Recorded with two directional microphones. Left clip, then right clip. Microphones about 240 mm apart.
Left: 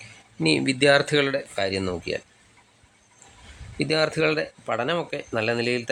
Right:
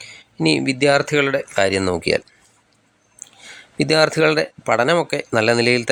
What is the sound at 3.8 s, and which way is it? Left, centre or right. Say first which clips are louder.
Speech: right 7 dB; centre.